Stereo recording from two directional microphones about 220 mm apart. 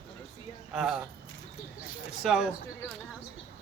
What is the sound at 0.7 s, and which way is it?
Speech, centre (ahead or behind).